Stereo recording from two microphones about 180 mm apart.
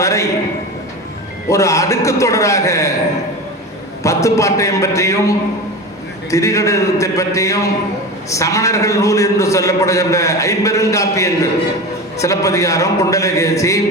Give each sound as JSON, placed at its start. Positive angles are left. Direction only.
{"t": 0.0, "sound": "a man's voice", "side_deg": 15}
{"t": 1.5, "sound": "a man's voice", "side_deg": 15}
{"t": 4.0, "sound": "a man's voice", "side_deg": 15}
{"t": 6.3, "sound": "a man's voice", "side_deg": 15}